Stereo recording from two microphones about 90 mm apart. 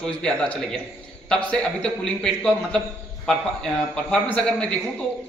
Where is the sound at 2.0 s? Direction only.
10° left (ahead or behind).